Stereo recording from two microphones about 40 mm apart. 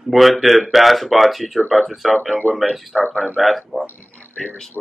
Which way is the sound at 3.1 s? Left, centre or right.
Centre.